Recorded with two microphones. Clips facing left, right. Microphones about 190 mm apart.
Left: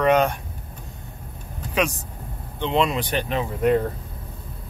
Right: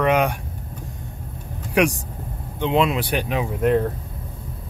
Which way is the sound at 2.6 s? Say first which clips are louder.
Right 2 dB; 5° right (ahead or behind).